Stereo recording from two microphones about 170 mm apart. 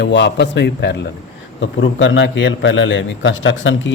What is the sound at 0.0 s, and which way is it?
Speech, 90° left.